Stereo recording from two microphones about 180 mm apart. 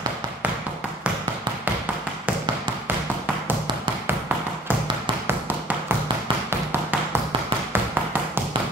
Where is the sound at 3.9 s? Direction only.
25° right (ahead or behind).